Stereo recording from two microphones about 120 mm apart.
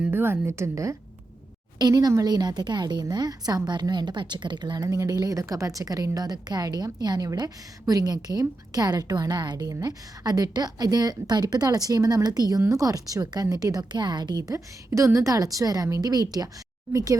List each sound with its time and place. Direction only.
0.0 s a woman's voice: 15° right (ahead or behind)